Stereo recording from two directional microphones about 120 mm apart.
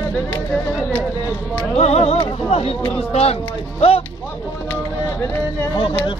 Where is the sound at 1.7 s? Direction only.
60° left (ahead or behind).